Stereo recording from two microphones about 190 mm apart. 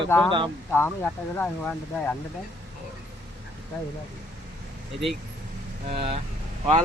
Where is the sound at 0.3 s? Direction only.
25° right (ahead or behind).